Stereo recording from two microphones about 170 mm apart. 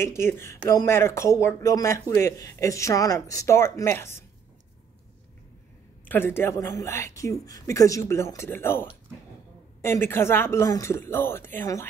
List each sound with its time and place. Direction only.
0.0 s speech: 15° left (ahead or behind)
6.0 s speech: 15° left (ahead or behind)